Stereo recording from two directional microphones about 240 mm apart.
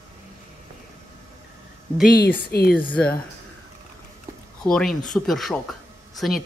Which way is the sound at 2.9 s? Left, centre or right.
Centre.